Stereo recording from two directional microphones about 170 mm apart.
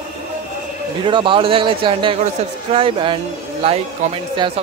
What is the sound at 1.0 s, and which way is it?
Speech, 30° right (ahead or behind).